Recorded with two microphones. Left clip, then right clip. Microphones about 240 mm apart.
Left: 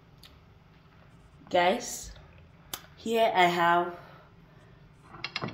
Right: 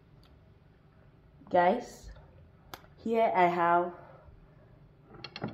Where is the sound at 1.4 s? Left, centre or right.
Centre.